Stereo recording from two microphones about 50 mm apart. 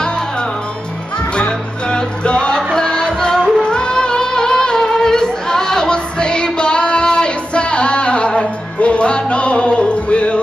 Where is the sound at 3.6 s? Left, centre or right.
Centre.